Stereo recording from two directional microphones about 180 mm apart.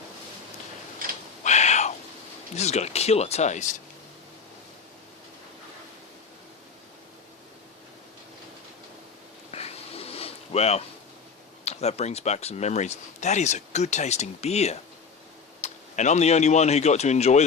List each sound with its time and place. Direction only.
1.5 s owl: 40° left (ahead or behind)
2.6 s speech: 40° left (ahead or behind)
9.5 s a sound: 35° left (ahead or behind)
11.6 s speech: 35° left (ahead or behind)